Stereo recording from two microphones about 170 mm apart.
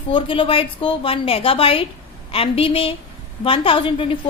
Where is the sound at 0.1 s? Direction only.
30° left (ahead or behind).